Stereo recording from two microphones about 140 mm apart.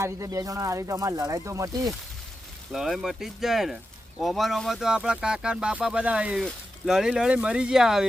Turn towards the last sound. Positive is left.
turn(degrees=-5)  # may be behind; listen again after turning